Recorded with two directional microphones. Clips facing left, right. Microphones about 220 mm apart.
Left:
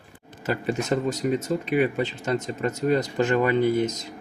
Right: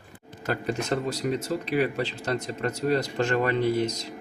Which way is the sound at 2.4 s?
5° left (ahead or behind).